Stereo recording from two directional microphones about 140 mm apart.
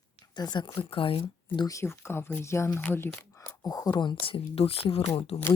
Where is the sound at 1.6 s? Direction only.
20° left (ahead or behind).